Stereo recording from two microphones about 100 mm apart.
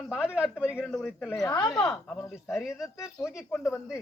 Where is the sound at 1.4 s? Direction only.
40° left (ahead or behind).